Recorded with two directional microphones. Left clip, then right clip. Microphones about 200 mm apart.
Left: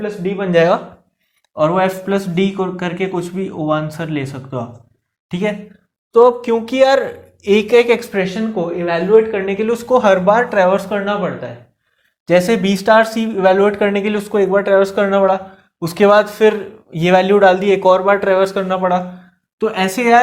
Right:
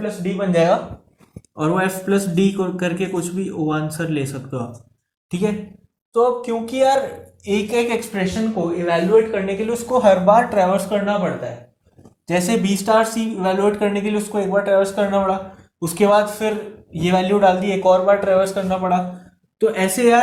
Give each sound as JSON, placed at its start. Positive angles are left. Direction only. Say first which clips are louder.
{"t": 0.0, "sound": "a man's voice", "louder": "left 3 dB", "side_deg": 35}
{"t": 12.3, "sound": "a man's voice", "louder": "left 7 dB", "side_deg": 45}